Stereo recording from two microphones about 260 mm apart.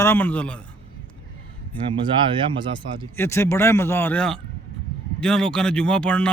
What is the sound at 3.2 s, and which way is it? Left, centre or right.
A man's voice, centre.